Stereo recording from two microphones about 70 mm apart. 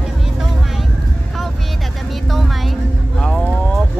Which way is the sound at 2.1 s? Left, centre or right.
Centre.